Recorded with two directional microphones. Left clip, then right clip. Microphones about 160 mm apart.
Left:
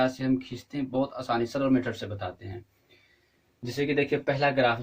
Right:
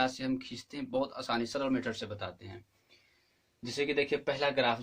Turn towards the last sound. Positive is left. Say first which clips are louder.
# left 5 dB
turn(degrees=-40)  # may be behind; listen again after turning